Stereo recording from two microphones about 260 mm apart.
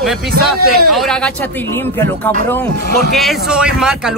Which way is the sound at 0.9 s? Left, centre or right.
Centre.